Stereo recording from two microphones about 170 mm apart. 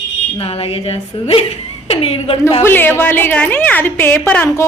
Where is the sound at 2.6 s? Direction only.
10° left (ahead or behind).